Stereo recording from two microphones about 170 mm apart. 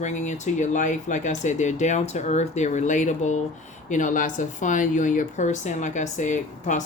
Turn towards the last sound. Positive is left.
turn(degrees=45)  # may be behind; listen again after turning